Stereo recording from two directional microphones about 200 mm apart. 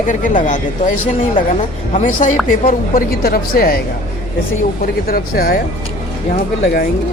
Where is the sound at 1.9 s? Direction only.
40° left (ahead or behind).